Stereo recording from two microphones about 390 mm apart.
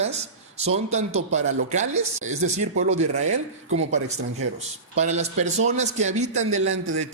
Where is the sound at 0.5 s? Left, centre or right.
Centre.